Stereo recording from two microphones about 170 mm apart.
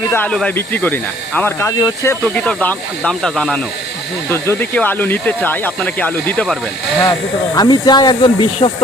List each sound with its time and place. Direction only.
0.1 s speech: 10° left (ahead or behind)
7.0 s speech: 25° left (ahead or behind)